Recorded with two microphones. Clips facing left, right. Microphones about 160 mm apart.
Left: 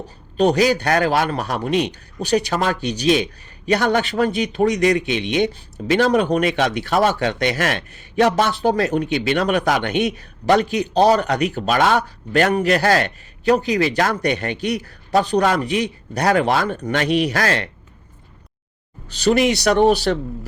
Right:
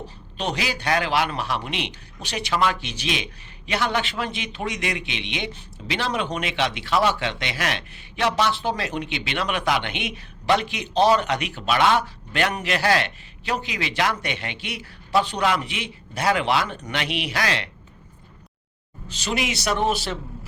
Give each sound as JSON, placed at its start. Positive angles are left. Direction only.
{"t": 0.3, "sound": "a man's voice", "side_deg": 40}
{"t": 19.3, "sound": "speech", "side_deg": 45}
{"t": 19.7, "sound": "a man's voice", "side_deg": 60}